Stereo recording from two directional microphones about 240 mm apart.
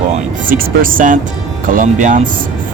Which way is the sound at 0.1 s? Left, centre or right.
Right.